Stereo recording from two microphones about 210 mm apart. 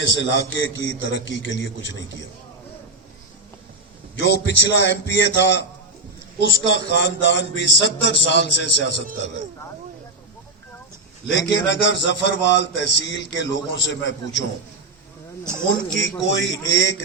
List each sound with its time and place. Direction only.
0.0 s a man's voice: 60° left (ahead or behind)
4.2 s a man's voice: 55° left (ahead or behind)
6.7 s a man's voice: 55° left (ahead or behind)
11.3 s a man's voice: 60° left (ahead or behind)
15.9 s a man's voice: 60° left (ahead or behind)